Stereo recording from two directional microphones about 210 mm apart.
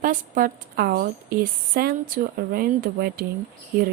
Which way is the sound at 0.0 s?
40° right (ahead or behind).